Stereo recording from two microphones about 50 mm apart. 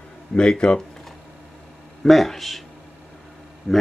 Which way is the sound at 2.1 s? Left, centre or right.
Centre.